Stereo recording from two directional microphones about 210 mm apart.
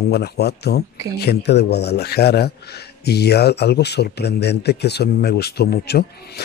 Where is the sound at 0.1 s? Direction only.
50° left (ahead or behind).